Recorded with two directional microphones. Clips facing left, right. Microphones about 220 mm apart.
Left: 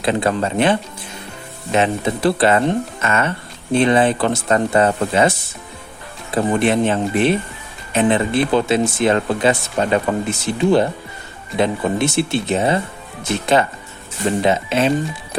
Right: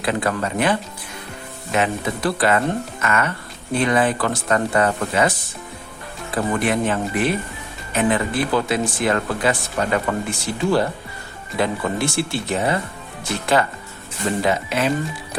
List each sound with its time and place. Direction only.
0.0 s speech: 25° left (ahead or behind)
6.3 s speech: 25° left (ahead or behind)